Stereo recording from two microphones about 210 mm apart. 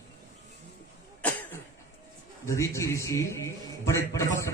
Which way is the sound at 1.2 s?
5° left (ahead or behind).